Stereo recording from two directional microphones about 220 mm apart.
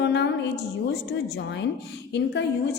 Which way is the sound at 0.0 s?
50° left (ahead or behind).